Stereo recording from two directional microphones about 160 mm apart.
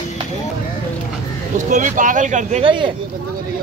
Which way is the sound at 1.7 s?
55° right (ahead or behind).